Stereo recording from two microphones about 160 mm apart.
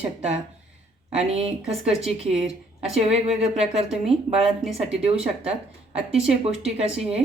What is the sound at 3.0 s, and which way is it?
A woman's voice, 40° right (ahead or behind).